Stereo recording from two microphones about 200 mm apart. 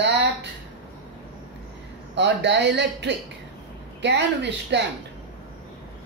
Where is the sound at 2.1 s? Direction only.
60° right (ahead or behind).